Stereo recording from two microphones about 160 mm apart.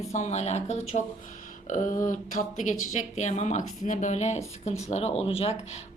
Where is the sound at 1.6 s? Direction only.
55° left (ahead or behind).